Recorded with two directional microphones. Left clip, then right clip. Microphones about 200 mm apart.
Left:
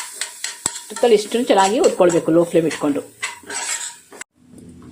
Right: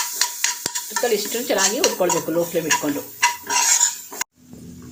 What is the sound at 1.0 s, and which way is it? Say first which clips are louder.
Speech: left 8 dB; 30° left (ahead or behind).